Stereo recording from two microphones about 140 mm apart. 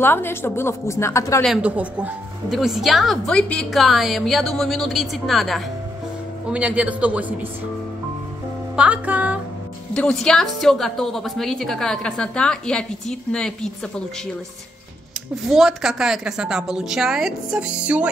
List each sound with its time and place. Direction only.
0.0 s a woman's voice: 15° left (ahead or behind)
1.4 s a man's voice: 5° right (ahead or behind)
8.7 s a man's voice: 10° right (ahead or behind)
9.9 s a woman's voice: 5° left (ahead or behind)
15.5 s a woman's voice: 5° right (ahead or behind)